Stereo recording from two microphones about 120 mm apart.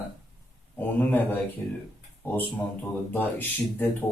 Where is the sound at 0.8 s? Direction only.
15° left (ahead or behind).